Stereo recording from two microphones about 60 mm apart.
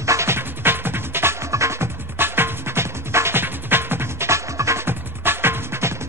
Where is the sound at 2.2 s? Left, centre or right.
Right.